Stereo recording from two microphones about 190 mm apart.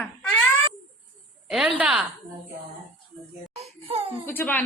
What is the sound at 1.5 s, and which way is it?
Speech, centre (ahead or behind).